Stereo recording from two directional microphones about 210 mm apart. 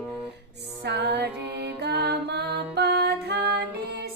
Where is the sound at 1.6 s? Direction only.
50° right (ahead or behind).